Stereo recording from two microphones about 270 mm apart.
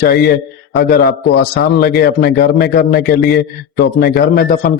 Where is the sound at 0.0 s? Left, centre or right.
Left.